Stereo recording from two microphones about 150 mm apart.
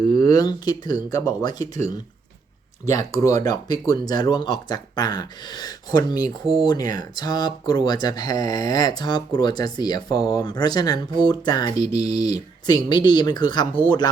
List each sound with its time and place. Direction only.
0.1 s speech: 25° left (ahead or behind)
2.8 s speech: 50° right (ahead or behind)
3.1 s speech: 20° left (ahead or behind)